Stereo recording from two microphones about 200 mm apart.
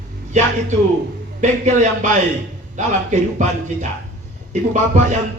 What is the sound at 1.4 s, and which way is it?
Speech, 40° right (ahead or behind).